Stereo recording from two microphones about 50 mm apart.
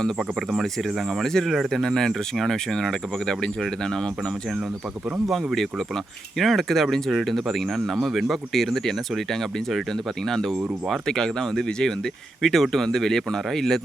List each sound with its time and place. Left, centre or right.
0.2 s speech: centre
1.5 s speech: centre
1.8 s speech: centre
6.4 s speech: centre